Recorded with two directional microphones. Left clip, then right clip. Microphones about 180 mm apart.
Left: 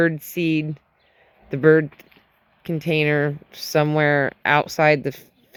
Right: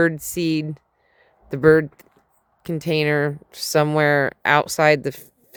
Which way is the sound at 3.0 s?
25° right (ahead or behind).